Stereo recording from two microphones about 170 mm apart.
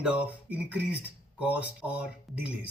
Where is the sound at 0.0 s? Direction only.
10° right (ahead or behind).